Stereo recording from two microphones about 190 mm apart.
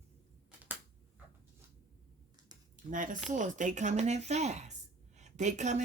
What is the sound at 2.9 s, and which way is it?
Speech, 45° right (ahead or behind).